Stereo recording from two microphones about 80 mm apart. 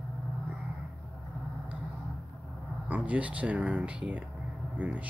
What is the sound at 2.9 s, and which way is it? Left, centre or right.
Speech, centre.